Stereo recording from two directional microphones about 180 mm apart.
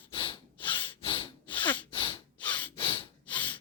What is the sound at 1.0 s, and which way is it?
Snort, 30° left (ahead or behind).